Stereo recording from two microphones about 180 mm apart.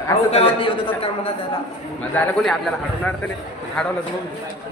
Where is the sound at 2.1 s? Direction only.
5° left (ahead or behind).